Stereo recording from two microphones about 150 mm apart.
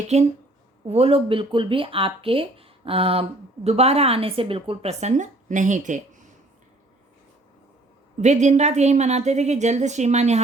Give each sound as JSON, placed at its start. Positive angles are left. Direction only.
{"t": 0.1, "sound": "a woman's voice", "side_deg": -45}
{"t": 8.2, "sound": "a woman's voice", "side_deg": -50}